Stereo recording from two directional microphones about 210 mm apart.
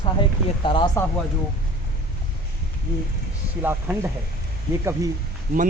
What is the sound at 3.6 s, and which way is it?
Speech, 10° right (ahead or behind).